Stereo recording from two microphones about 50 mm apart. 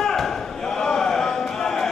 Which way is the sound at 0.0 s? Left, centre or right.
Centre.